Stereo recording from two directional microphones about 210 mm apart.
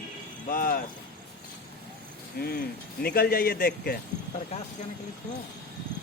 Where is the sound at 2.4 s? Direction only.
45° left (ahead or behind).